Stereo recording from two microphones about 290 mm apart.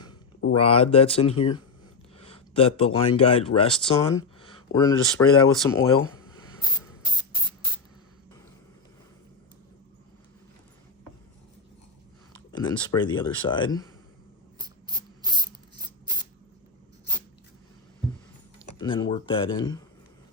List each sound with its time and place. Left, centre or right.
0.5 s speech: centre
2.1 s a sound: centre
3.2 s speech: centre
12.5 s speech: centre
14.6 s rub: centre
18.8 s speech: centre